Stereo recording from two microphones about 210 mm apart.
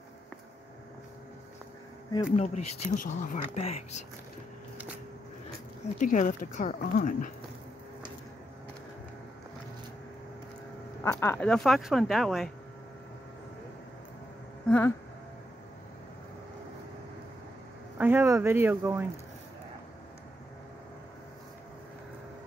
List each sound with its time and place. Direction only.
2.3 s speech: 30° left (ahead or behind)
5.9 s speech: 40° left (ahead or behind)
11.1 s speech: 15° left (ahead or behind)
14.7 s a sound: 5° left (ahead or behind)
17.9 s speech: 10° right (ahead or behind)